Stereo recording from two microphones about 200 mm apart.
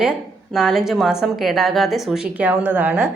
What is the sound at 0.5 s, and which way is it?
A woman's voice, centre (ahead or behind).